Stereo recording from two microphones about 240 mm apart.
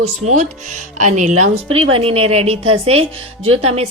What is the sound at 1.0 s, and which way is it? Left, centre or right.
A woman's voice, right.